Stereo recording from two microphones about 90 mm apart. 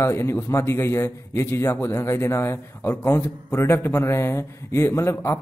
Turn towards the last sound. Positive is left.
turn(degrees=35)  # may be behind; listen again after turning